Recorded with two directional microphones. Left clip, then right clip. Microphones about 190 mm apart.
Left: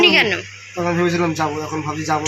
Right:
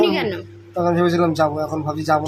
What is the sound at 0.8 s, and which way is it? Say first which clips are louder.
Speech: right 1 dB; 30° right (ahead or behind).